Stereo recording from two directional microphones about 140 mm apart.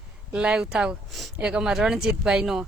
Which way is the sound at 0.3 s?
5° right (ahead or behind).